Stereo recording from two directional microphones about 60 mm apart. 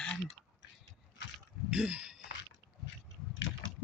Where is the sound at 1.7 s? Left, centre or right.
Centre.